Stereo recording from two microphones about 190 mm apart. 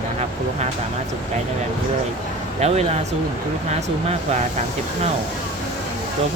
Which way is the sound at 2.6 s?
35° right (ahead or behind).